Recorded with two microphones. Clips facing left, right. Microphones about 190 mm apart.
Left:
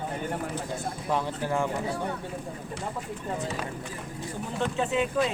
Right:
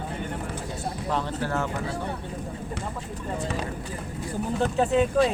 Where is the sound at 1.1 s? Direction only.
15° left (ahead or behind).